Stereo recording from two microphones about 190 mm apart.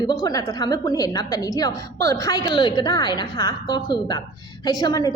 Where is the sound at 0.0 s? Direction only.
20° left (ahead or behind).